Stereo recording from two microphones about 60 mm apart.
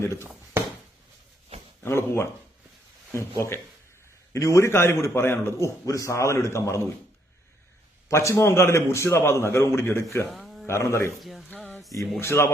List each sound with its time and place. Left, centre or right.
0.2 s a sound: right
1.8 s a man's voice: left
5.8 s a man's voice: left
8.1 s a man's voice: left
10.3 s a sound: centre
10.7 s a man's voice: left
11.2 s speech: centre
12.2 s a man's voice: left